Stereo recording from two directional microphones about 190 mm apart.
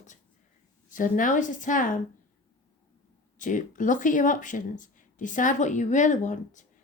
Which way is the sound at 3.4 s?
40° left (ahead or behind).